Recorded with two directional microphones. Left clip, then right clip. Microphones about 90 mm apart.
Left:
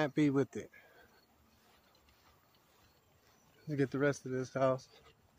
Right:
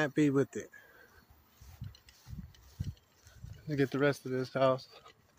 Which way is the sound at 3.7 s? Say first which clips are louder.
Right 3 dB; 10° right (ahead or behind).